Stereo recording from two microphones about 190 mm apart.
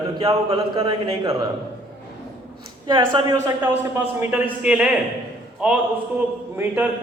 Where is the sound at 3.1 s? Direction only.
15° right (ahead or behind).